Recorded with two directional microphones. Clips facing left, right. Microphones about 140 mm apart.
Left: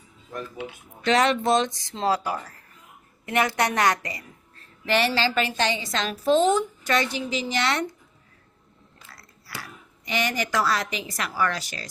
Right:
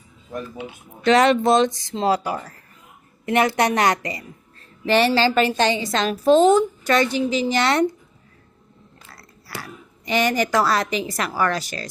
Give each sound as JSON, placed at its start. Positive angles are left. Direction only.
{"t": 1.0, "sound": "a woman's voice", "side_deg": -40}
{"t": 2.0, "sound": "speech", "side_deg": -15}
{"t": 4.9, "sound": "a woman's voice", "side_deg": -35}
{"t": 9.1, "sound": "biting", "side_deg": -30}
{"t": 10.1, "sound": "a woman's voice", "side_deg": -40}